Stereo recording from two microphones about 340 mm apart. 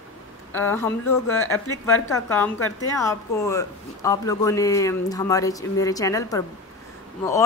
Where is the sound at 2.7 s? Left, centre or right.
Centre.